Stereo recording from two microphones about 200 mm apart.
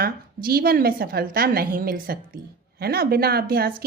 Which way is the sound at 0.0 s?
50° right (ahead or behind).